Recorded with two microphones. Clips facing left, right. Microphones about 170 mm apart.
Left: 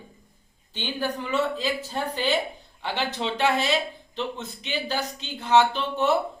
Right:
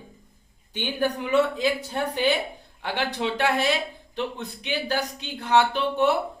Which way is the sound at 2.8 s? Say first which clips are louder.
Right 1 dB; 15° right (ahead or behind).